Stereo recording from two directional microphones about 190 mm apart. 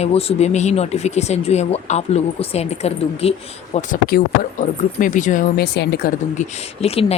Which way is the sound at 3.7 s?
45° left (ahead or behind).